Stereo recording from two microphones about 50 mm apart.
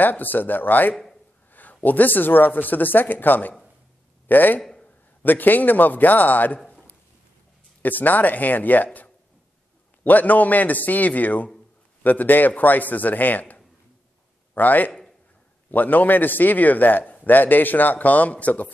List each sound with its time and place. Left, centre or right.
0.0 s speech: left
7.8 s a man's voice: left